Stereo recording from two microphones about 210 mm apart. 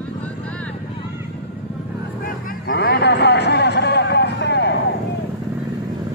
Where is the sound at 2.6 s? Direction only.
50° left (ahead or behind).